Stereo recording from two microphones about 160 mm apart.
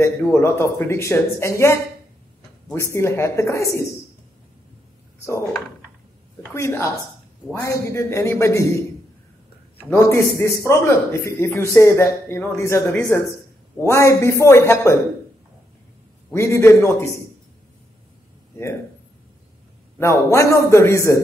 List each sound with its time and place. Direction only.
0.0 s a man's voice: 15° left (ahead or behind)
6.5 s a man's voice: 15° left (ahead or behind)
9.8 s a man's voice: 15° left (ahead or behind)
16.3 s a man's voice: 15° left (ahead or behind)
20.0 s a man's voice: 20° left (ahead or behind)